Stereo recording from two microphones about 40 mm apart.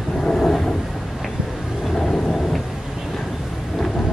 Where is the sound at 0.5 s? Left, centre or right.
Centre.